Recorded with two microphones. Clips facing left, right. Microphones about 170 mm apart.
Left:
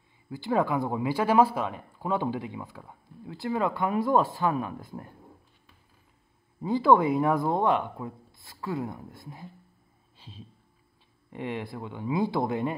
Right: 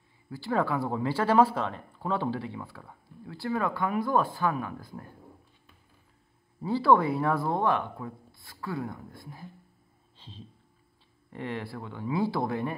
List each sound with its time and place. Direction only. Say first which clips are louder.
0.3 s speech: left 2 dB; 15° left (ahead or behind)
6.6 s speech: left 2 dB; 15° left (ahead or behind)
10.1 s a sound: even; 10° left (ahead or behind)
11.3 s speech: left 2 dB; 15° left (ahead or behind)